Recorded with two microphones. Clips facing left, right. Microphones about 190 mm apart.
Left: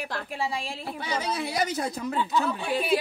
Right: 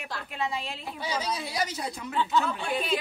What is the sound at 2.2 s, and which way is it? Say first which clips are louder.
Speech: right 1 dB; 10° left (ahead or behind).